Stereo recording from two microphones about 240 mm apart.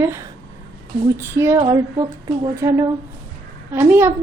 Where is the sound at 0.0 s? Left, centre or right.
Centre.